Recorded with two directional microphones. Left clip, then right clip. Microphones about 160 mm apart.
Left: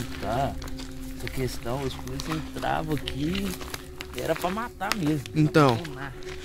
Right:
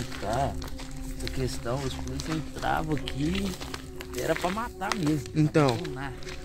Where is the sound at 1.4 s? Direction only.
10° right (ahead or behind).